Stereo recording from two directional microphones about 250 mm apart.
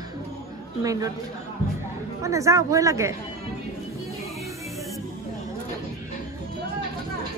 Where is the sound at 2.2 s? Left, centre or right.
Centre.